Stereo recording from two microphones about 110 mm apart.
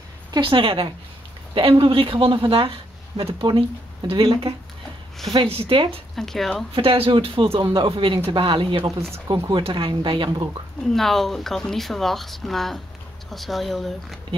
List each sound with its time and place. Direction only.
0.4 s speech: 50° right (ahead or behind)
6.1 s speech: 5° left (ahead or behind)
6.7 s speech: 55° right (ahead or behind)
10.8 s speech: 5° left (ahead or behind)